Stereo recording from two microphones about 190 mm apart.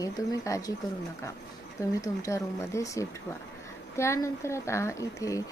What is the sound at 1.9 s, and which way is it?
A woman's voice, 15° left (ahead or behind).